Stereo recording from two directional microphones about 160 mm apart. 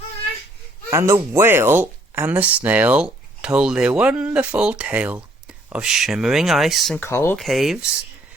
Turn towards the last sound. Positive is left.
turn(degrees=0)  # may be behind; listen again after turning